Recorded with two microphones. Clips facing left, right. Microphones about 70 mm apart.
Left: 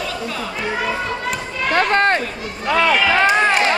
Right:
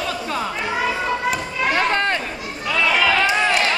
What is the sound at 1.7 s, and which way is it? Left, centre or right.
Run, left.